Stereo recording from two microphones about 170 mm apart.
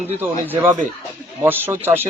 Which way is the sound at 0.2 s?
10° right (ahead or behind).